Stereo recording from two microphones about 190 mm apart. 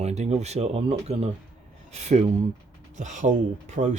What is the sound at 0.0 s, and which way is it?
Speech, 35° right (ahead or behind).